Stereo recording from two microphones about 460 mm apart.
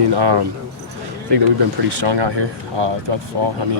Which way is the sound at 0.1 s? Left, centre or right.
Right.